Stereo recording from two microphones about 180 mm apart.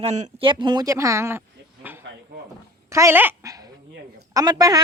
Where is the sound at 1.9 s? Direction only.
10° right (ahead or behind).